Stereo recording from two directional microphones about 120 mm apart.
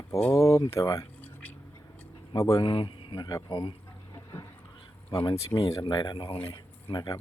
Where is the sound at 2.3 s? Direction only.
30° left (ahead or behind).